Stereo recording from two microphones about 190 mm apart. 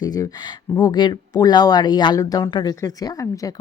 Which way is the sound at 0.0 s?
20° left (ahead or behind).